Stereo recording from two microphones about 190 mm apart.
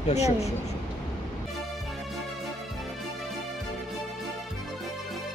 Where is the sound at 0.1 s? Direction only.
35° left (ahead or behind).